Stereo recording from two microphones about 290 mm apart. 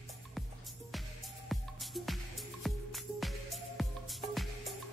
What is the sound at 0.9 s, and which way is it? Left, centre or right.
Music, centre.